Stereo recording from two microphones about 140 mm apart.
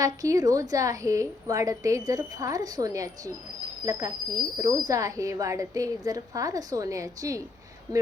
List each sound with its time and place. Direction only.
0.0 s speech: 25° right (ahead or behind)